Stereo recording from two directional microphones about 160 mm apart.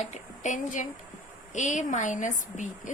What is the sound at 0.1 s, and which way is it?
A woman's voice, 50° left (ahead or behind).